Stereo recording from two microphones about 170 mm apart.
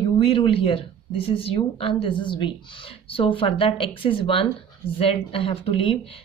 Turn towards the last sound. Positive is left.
turn(degrees=35)  # may be behind; listen again after turning